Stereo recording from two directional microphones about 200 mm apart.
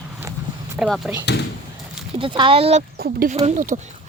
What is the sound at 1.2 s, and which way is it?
Speech, 55° left (ahead or behind).